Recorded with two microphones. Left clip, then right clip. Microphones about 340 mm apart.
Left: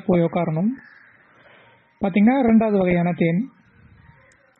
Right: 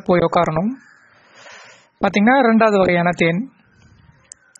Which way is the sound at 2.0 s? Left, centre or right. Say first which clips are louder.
Right 5 dB; right.